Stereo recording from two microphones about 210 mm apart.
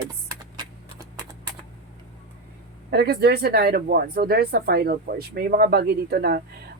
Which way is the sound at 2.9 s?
50° right (ahead or behind).